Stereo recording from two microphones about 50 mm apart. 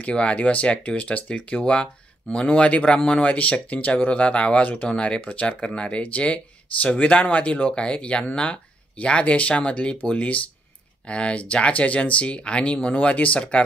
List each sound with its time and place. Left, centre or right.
0.0 s speech: left